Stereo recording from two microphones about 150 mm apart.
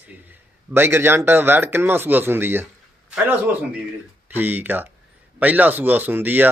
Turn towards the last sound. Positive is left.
turn(degrees=-10)  # may be behind; listen again after turning